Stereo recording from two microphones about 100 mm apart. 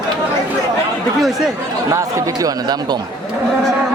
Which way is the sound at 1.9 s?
30° right (ahead or behind).